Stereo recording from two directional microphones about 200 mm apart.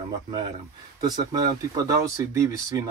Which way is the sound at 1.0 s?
20° right (ahead or behind).